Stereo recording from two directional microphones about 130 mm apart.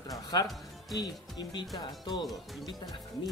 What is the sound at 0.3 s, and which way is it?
Speech, 30° left (ahead or behind).